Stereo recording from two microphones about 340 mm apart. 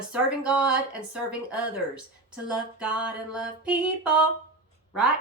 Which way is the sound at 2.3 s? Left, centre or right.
Centre.